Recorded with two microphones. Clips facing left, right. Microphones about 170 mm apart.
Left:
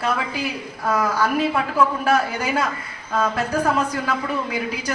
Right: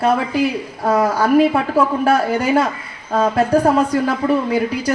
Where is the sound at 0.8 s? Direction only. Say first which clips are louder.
Right 5 dB; 35° right (ahead or behind).